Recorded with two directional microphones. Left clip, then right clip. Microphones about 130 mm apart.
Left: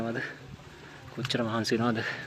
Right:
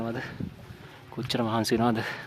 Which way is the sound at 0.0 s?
30° right (ahead or behind).